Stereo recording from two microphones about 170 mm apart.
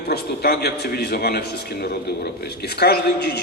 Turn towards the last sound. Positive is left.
turn(degrees=70)  # may be behind; listen again after turning